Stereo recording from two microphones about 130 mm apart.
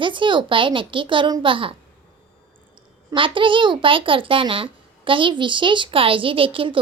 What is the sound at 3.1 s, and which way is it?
Speech, 40° right (ahead or behind).